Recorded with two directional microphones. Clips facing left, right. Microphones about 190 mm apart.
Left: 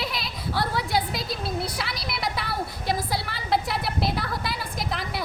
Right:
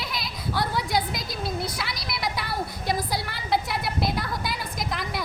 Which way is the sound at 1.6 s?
30° left (ahead or behind).